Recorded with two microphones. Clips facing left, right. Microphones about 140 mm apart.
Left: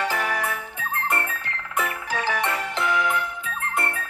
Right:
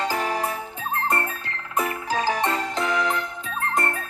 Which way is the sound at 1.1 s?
35° right (ahead or behind).